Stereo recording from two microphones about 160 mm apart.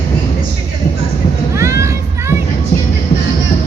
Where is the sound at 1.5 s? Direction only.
15° right (ahead or behind).